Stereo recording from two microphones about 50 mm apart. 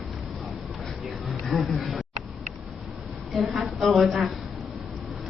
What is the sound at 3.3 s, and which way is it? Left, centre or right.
Speech, centre.